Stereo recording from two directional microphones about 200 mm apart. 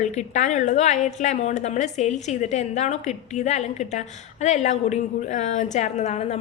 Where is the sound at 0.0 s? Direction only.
35° left (ahead or behind).